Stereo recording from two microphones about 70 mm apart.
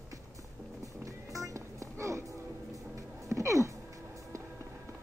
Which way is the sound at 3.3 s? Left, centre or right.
Right.